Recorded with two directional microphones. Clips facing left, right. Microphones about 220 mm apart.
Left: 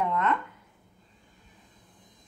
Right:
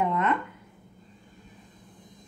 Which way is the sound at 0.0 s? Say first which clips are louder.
Right 2 dB; 10° right (ahead or behind).